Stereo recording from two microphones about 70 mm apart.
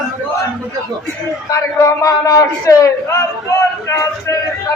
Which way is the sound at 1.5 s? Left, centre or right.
Left.